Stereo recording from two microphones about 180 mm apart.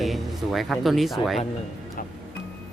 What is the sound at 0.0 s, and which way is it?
Speech, centre (ahead or behind).